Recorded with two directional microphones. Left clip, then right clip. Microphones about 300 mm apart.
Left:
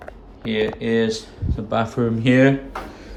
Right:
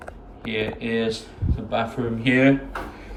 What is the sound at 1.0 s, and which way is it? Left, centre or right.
Speech, centre.